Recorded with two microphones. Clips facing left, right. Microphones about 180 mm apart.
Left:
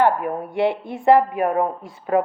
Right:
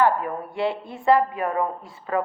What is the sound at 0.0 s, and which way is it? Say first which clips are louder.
Music: left 2 dB; 65° left (ahead or behind).